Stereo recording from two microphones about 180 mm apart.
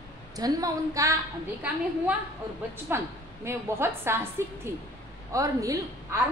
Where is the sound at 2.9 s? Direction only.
15° right (ahead or behind).